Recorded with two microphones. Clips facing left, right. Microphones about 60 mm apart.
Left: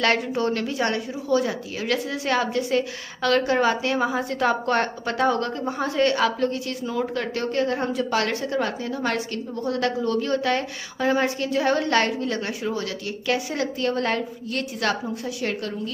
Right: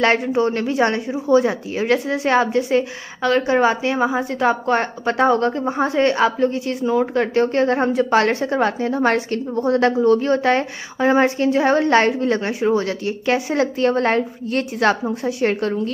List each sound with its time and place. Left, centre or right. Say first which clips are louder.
0.0 s a woman's voice: right 5 dB; right
7.5 s a woman's voice: right 6 dB; right